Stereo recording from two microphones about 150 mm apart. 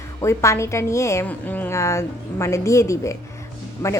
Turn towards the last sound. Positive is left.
turn(degrees=15)  # may be behind; listen again after turning